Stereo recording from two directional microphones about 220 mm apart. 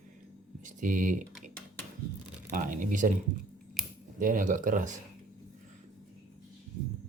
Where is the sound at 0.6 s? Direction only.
35° right (ahead or behind).